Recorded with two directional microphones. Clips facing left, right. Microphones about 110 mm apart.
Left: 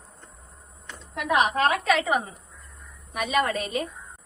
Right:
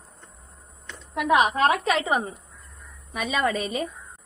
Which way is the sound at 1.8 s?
30° right (ahead or behind).